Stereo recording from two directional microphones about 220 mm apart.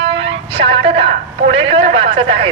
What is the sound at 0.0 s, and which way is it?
Music, 55° right (ahead or behind).